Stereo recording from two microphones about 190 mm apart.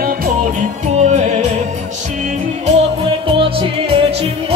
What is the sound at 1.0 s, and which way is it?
Music, 35° right (ahead or behind).